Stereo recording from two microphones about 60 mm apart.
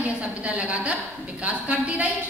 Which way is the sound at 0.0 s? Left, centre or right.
Right.